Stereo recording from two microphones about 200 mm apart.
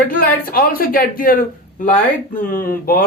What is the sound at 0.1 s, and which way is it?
A man's voice, 45° left (ahead or behind).